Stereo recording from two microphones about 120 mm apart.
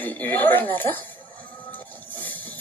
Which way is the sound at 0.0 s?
15° left (ahead or behind).